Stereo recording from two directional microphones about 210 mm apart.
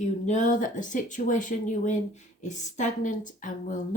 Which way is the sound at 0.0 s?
35° left (ahead or behind).